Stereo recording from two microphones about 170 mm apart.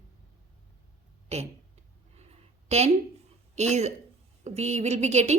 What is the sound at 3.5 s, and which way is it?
A woman's voice, 40° right (ahead or behind).